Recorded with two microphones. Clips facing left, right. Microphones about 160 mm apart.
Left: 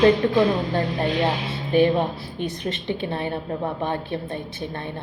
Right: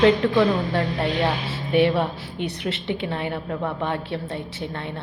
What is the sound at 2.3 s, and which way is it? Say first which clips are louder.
Speech: right 1 dB; 70° right (ahead or behind).